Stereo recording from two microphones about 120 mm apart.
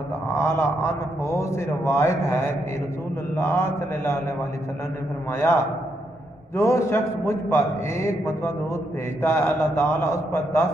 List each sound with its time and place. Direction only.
0.4 s a man's voice: 20° left (ahead or behind)
5.4 s a man's voice: 20° left (ahead or behind)